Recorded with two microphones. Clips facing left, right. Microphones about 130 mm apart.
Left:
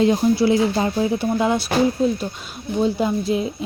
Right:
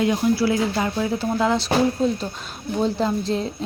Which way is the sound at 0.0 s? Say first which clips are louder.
Left 3 dB; 25° left (ahead or behind).